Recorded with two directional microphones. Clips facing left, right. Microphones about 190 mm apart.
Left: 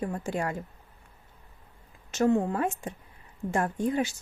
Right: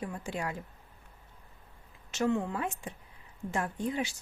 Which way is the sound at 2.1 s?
45° left (ahead or behind).